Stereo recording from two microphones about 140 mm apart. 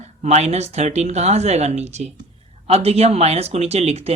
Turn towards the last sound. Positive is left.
turn(degrees=-50)  # may be behind; listen again after turning